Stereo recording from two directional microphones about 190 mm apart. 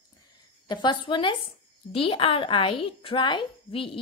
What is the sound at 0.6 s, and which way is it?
A woman's voice, 25° left (ahead or behind).